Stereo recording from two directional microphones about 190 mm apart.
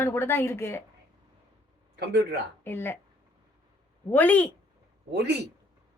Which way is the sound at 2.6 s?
10° left (ahead or behind).